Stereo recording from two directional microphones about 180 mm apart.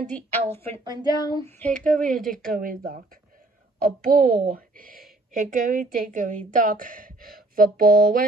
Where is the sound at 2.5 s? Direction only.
50° right (ahead or behind).